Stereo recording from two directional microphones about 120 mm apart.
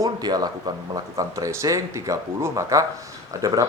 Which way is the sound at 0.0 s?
35° right (ahead or behind).